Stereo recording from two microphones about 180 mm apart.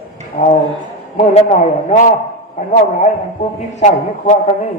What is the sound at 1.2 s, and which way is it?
Speech, 40° left (ahead or behind).